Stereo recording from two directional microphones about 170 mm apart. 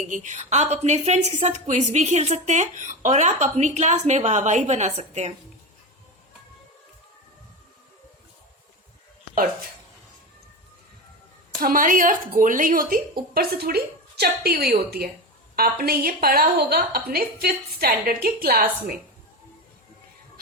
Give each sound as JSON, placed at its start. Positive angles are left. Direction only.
{"t": 0.1, "sound": "a woman's voice", "side_deg": -45}
{"t": 11.6, "sound": "a woman's voice", "side_deg": -55}